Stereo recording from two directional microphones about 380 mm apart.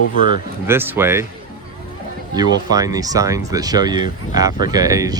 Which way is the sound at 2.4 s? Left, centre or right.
Centre.